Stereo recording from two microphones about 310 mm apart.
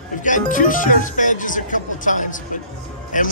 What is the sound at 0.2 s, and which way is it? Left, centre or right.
A man's voice, left.